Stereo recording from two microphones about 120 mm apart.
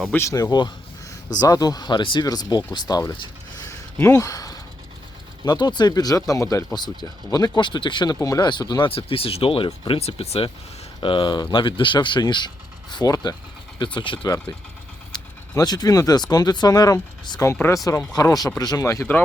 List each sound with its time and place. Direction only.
0.1 s speech: 25° left (ahead or behind)
3.9 s speech: 15° left (ahead or behind)
4.2 s a sound: 30° left (ahead or behind)
5.5 s speech: 35° left (ahead or behind)
6.7 s speech: 35° left (ahead or behind); by 10.5 s 55° left (ahead or behind)
11.0 s speech: 45° left (ahead or behind)
14.3 s speech: 30° left (ahead or behind)
15.5 s speech: 35° left (ahead or behind)
17.5 s speech: 20° left (ahead or behind)